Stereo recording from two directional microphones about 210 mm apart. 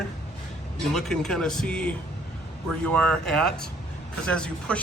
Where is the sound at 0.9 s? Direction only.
Centre (ahead or behind).